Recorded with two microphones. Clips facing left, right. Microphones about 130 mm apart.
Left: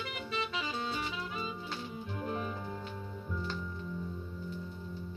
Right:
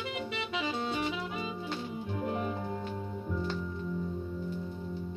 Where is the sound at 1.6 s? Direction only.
20° right (ahead or behind).